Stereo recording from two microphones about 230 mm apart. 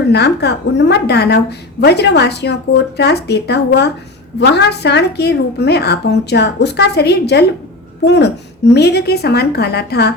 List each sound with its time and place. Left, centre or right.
0.1 s a woman's voice: left